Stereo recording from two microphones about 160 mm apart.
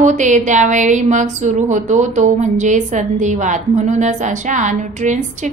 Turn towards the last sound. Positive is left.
turn(degrees=-50)  # may be behind; listen again after turning